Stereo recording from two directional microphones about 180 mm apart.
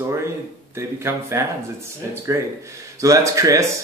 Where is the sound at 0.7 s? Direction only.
15° right (ahead or behind).